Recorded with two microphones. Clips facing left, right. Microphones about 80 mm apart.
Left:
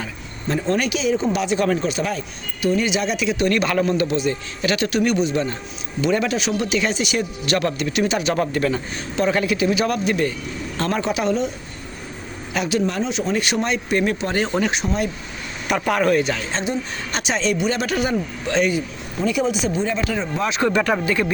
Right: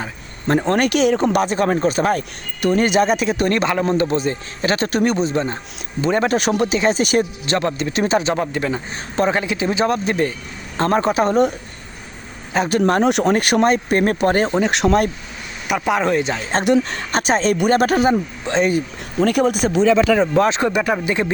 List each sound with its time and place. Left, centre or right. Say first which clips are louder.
0.4 s speech: right 4 dB; right
7.4 s speech: right 1 dB; right
8.4 s speech: left 1 dB; centre; by 11.5 s right
12.5 s speech: right 4 dB; right
12.8 s speech: right 7 dB; right
14.7 s speech: right 7 dB; right
15.8 s speech: even; centre
16.6 s speech: right 9 dB; right
17.1 s speech: right 3 dB; right
17.9 s speech: right 5 dB; right
19.2 s speech: right 4 dB; right
19.7 s speech: right 8 dB; right
20.6 s speech: even; centre